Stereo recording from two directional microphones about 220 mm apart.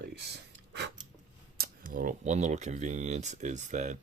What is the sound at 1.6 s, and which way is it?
Speech, 40° right (ahead or behind).